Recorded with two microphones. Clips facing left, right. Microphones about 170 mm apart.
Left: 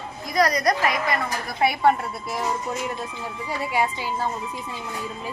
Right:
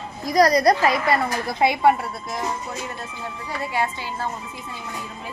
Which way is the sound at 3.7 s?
15° left (ahead or behind).